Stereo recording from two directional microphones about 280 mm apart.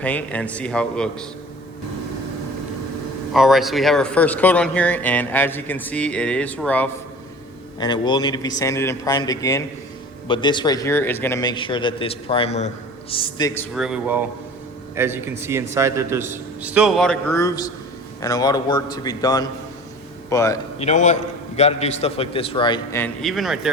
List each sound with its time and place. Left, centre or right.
0.0 s a man's voice: centre
3.3 s a man's voice: centre
20.7 s a man's voice: left; by 23.6 s centre